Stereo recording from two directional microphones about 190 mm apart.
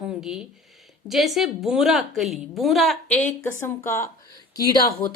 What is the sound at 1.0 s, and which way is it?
A woman's voice, centre (ahead or behind).